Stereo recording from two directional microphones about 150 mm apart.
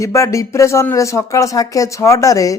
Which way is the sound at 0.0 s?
20° left (ahead or behind).